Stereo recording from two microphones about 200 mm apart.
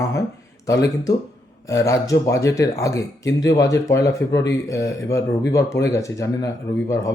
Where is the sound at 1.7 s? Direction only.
15° left (ahead or behind).